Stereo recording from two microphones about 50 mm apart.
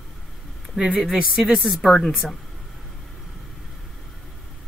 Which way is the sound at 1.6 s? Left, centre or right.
Centre.